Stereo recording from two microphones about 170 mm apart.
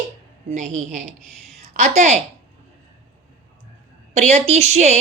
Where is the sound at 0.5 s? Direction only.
45° right (ahead or behind).